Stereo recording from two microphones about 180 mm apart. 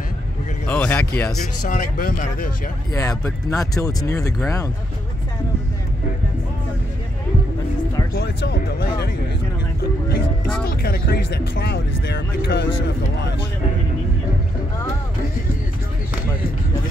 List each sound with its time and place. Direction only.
0.7 s speech: 10° left (ahead or behind)
1.6 s speech: 50° left (ahead or behind)
2.9 s speech: 15° left (ahead or behind)
8.1 s speech: 65° left (ahead or behind)
9.8 s music: 60° left (ahead or behind)
10.7 s speech: 60° left (ahead or behind)